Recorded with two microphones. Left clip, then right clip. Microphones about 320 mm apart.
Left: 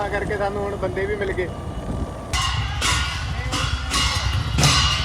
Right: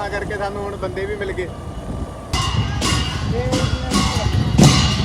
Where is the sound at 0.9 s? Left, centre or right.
Centre.